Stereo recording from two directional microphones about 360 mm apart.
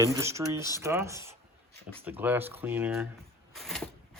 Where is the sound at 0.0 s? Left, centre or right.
Centre.